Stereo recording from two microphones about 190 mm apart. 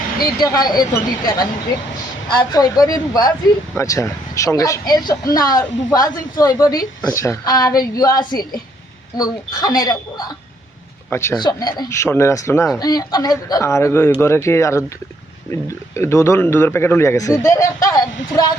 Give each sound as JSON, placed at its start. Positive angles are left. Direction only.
{"t": 0.3, "sound": "speech", "side_deg": 20}
{"t": 16.0, "sound": "speech", "side_deg": 15}